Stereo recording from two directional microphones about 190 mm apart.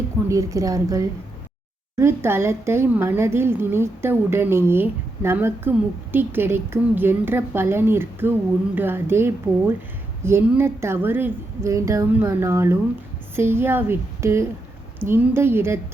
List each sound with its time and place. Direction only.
0.3 s a woman's voice: 15° right (ahead or behind)